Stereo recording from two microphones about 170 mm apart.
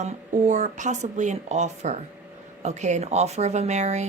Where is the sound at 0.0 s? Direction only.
45° right (ahead or behind).